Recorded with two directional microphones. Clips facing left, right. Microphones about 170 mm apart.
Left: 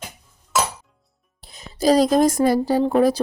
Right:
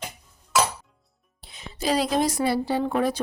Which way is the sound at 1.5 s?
40° left (ahead or behind).